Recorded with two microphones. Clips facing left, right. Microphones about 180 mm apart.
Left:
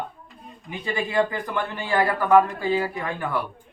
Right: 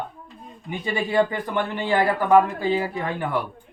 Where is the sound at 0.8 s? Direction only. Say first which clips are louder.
Right 2 dB; 20° right (ahead or behind).